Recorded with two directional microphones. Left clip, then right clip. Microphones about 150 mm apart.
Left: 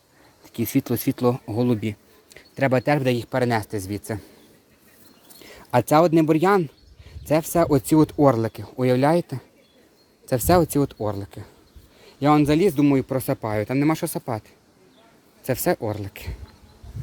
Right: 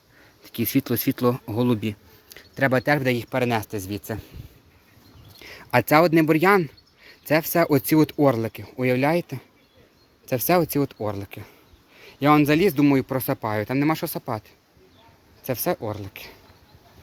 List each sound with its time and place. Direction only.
0.4 s speech: centre (ahead or behind)
5.4 s speech: 10° left (ahead or behind)
15.4 s speech: 30° left (ahead or behind)